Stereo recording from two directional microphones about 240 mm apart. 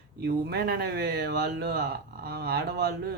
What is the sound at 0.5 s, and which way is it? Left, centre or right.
Speech, right.